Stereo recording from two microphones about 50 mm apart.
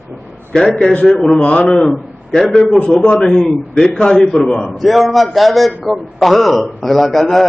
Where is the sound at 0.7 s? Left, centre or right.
Centre.